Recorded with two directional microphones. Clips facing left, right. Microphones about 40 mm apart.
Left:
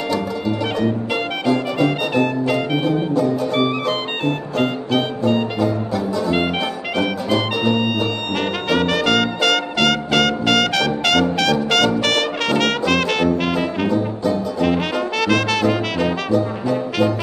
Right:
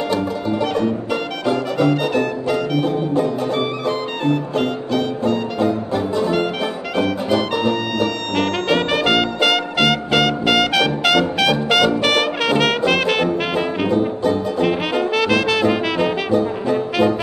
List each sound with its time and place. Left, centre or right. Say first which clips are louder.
4.2 s music: right 3 dB; left
5.6 s music: right 1 dB; right
6.6 s music: right 1 dB; centre
8.4 s brass instrument: right 2 dB; centre
11.7 s music: right 3 dB; centre
14.6 s brass instrument: left 1 dB; centre